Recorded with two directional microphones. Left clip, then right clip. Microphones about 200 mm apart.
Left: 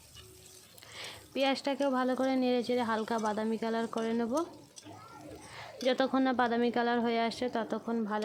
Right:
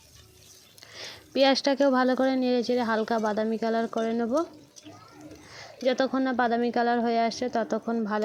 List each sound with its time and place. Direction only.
0.9 s speech: 25° right (ahead or behind)
5.8 s speech: 10° right (ahead or behind)